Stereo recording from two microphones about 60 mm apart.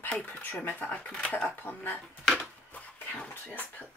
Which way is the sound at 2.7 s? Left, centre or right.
Left.